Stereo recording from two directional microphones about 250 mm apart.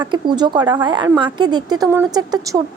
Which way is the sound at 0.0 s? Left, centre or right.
Centre.